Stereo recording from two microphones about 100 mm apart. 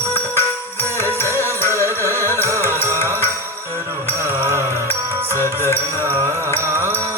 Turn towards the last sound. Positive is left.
turn(degrees=-25)  # may be behind; listen again after turning